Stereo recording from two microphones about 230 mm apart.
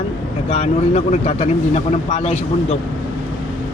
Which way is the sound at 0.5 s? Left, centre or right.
Left.